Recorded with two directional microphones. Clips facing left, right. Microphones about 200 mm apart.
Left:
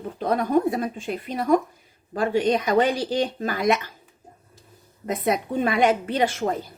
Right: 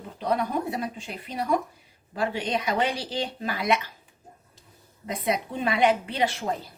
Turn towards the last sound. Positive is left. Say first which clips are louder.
# left 4 dB
turn(degrees=45)  # may be behind; listen again after turning